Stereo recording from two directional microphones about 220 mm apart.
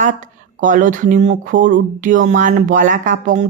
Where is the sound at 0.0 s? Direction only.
35° right (ahead or behind).